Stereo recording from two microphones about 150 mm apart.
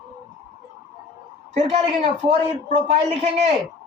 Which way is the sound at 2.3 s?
45° right (ahead or behind).